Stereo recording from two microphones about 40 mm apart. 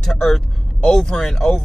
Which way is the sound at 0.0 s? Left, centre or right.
Centre.